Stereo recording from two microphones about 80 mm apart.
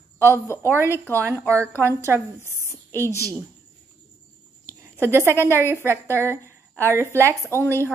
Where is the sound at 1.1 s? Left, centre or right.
Right.